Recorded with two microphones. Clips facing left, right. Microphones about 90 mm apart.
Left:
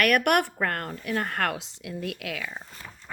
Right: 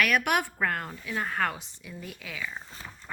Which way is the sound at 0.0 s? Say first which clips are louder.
Left 4 dB; 60° left (ahead or behind).